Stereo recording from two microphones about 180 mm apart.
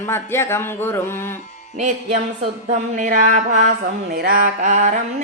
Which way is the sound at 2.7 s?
45° right (ahead or behind).